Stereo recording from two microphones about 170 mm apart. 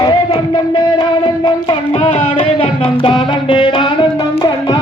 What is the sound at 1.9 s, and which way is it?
Music, 40° left (ahead or behind).